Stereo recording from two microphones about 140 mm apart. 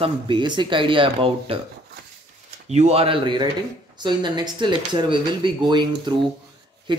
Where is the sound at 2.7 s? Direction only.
50° right (ahead or behind).